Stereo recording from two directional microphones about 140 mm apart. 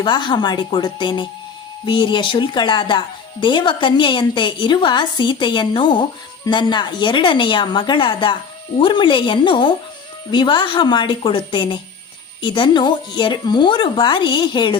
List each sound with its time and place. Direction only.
0.0 s a woman's voice: 35° left (ahead or behind)